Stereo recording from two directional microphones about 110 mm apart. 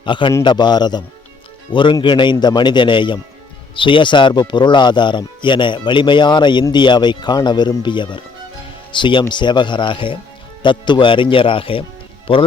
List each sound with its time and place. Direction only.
0.0 s a man's voice: 50° left (ahead or behind)